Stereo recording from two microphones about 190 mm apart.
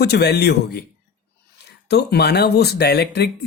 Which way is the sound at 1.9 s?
60° left (ahead or behind).